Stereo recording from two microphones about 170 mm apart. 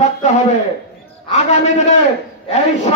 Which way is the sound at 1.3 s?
40° left (ahead or behind).